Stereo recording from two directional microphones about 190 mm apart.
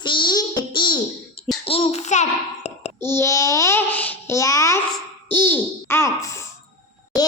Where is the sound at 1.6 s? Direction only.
30° left (ahead or behind).